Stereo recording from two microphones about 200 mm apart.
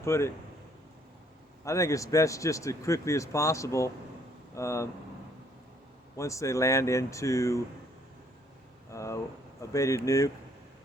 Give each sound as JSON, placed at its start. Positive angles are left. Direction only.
{"t": 0.0, "sound": "speech", "side_deg": 15}
{"t": 1.6, "sound": "speech", "side_deg": 15}
{"t": 6.1, "sound": "speech", "side_deg": 15}
{"t": 8.9, "sound": "speech", "side_deg": 15}